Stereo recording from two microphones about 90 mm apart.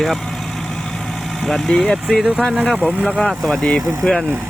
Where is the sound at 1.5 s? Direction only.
5° left (ahead or behind).